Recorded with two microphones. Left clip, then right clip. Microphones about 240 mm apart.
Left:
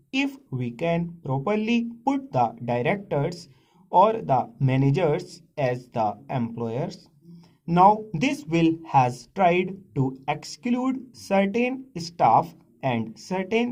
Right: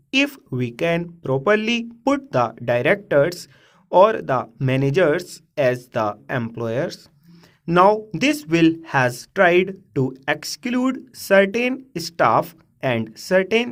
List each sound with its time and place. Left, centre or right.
0.1 s speech: right